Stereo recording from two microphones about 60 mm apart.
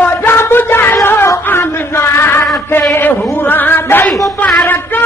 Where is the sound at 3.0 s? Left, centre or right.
Left.